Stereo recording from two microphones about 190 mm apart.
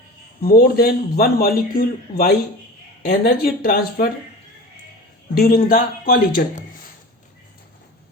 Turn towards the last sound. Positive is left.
turn(degrees=50)  # may be behind; listen again after turning